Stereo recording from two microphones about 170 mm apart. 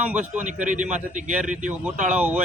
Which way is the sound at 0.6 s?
45° right (ahead or behind).